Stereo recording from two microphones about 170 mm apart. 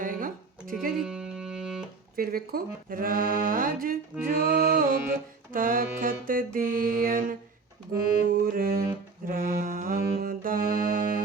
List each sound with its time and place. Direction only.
0.0 s music: 50° right (ahead or behind)
0.9 s music: 5° right (ahead or behind)
2.1 s speech: 60° right (ahead or behind)
8.4 s speech: 60° right (ahead or behind)
9.2 s music: 55° right (ahead or behind)